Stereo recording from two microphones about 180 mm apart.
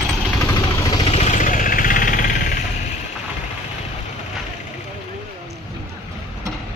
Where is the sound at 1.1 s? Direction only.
40° left (ahead or behind).